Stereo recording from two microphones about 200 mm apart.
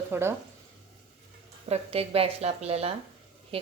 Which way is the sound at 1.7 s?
30° right (ahead or behind).